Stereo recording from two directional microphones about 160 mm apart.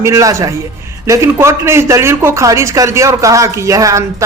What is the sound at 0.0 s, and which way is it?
Speech, 20° right (ahead or behind).